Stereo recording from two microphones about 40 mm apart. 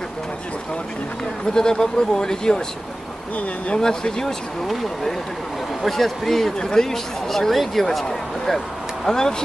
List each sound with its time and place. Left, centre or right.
1.4 s speech: centre
3.3 s speech: left
3.8 s speech: centre
5.8 s speech: centre